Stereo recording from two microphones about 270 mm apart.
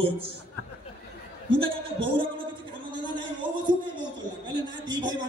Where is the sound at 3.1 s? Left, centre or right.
Centre.